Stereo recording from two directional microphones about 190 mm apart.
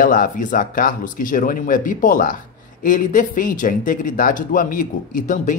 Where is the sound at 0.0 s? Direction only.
45° left (ahead or behind).